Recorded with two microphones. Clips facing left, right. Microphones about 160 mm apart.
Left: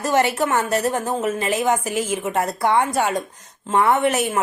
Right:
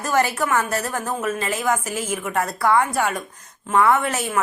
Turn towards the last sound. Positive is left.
turn(degrees=20)  # may be behind; listen again after turning